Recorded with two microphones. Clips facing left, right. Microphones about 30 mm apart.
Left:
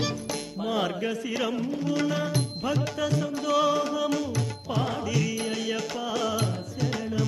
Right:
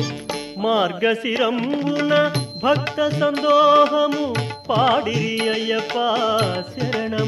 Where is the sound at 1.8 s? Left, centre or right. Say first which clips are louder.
Right 10 dB; right.